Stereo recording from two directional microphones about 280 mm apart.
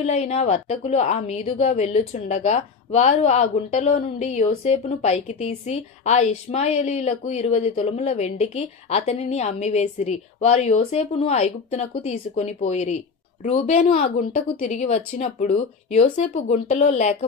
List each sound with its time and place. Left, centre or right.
0.0 s a woman's voice: left